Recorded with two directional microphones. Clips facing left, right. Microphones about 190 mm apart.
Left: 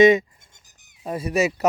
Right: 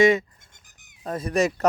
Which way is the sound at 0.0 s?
20° left (ahead or behind).